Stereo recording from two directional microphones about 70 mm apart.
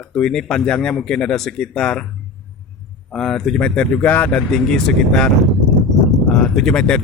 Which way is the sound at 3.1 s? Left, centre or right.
Centre.